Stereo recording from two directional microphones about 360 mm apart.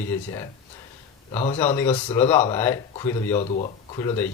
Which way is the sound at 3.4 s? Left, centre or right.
Centre.